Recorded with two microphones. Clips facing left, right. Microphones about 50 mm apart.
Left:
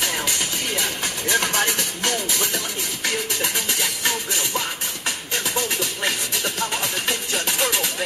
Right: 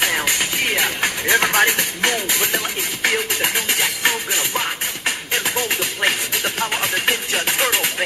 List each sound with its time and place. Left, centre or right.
0.0 s vehicle: right
2.0 s music: right